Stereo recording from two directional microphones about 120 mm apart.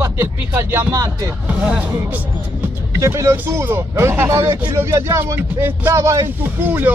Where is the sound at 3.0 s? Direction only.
25° right (ahead or behind).